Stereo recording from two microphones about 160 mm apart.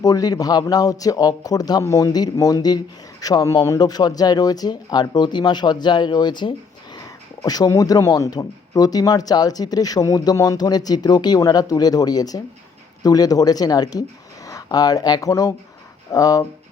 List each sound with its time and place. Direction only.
0.0 s speech: 25° left (ahead or behind)